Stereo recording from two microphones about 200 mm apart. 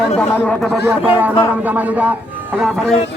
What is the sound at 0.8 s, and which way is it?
Speech, 5° right (ahead or behind).